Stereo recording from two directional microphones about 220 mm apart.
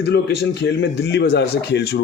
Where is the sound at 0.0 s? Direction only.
50° left (ahead or behind).